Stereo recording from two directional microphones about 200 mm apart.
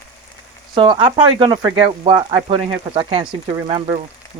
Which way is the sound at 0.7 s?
25° right (ahead or behind).